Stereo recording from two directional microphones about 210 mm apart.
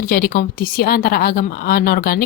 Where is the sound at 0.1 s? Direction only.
40° left (ahead or behind).